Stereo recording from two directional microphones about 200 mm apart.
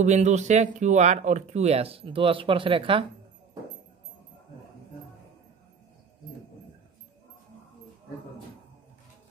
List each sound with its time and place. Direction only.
0.0 s speech: 35° right (ahead or behind)